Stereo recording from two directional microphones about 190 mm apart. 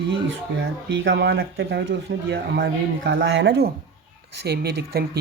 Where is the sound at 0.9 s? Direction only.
70° right (ahead or behind).